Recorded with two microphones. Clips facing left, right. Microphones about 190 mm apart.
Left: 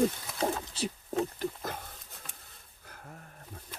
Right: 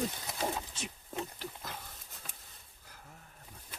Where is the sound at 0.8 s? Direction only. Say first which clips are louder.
Left 9 dB; 35° left (ahead or behind).